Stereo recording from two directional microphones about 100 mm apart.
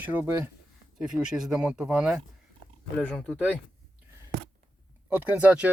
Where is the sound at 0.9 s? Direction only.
5° right (ahead or behind).